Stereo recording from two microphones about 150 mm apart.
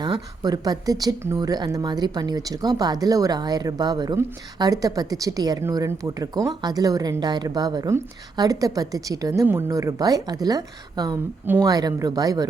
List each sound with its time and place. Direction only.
0.0 s speech: 25° right (ahead or behind)